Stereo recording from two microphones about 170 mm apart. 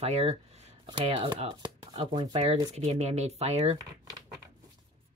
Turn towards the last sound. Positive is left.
turn(degrees=-40)  # may be behind; listen again after turning